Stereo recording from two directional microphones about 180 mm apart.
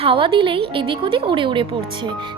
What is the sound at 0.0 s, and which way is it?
Speech, 30° right (ahead or behind).